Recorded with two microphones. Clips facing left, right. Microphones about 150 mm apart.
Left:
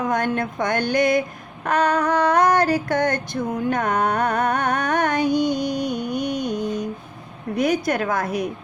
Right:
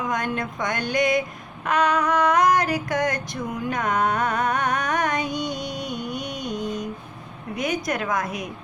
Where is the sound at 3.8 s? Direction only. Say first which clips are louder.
Right 1 dB; 50° left (ahead or behind).